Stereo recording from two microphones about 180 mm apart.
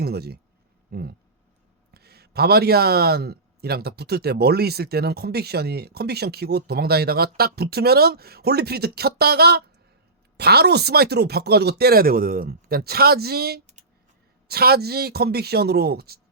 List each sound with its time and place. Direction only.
0.0 s a man's voice: 60° right (ahead or behind)